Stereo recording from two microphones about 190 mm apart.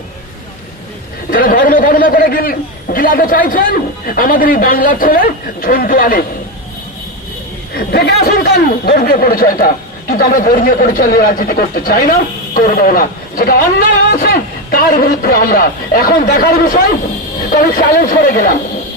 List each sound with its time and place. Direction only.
1.3 s a man's voice: 45° left (ahead or behind)
7.7 s chatter: 55° left (ahead or behind)
8.2 s a man's voice: 55° left (ahead or behind)